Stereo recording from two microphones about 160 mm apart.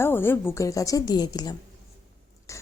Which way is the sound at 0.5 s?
20° left (ahead or behind).